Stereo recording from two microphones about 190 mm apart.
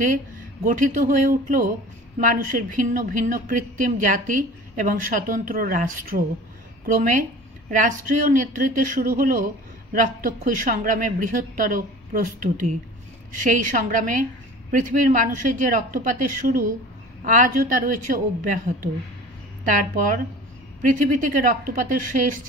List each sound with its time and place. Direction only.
0.7 s speech: 45° right (ahead or behind)